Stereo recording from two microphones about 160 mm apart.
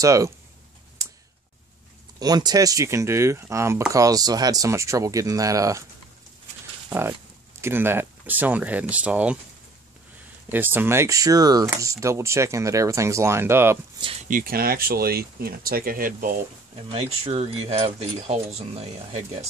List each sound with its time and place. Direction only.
0.0 s speech: 20° right (ahead or behind)
2.1 s speech: 25° right (ahead or behind)
6.9 s speech: 15° right (ahead or behind)
10.5 s speech: 10° right (ahead or behind)
14.2 s speech: 60° right (ahead or behind)
16.9 s speech: 35° right (ahead or behind)